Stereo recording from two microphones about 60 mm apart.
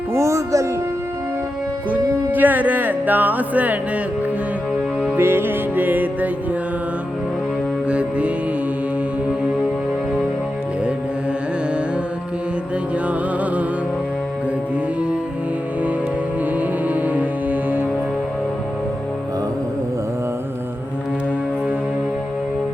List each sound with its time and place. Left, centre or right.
0.1 s music: right
1.9 s music: right
5.1 s music: right
7.9 s music: right
16.9 s music: right